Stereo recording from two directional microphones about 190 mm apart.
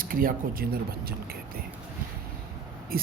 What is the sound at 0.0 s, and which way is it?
Speech, 50° right (ahead or behind).